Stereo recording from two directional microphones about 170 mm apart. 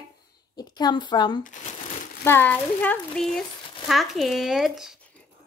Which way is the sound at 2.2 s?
10° left (ahead or behind).